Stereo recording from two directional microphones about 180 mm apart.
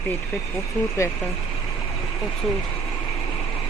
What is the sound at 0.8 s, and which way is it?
Speech, 15° left (ahead or behind).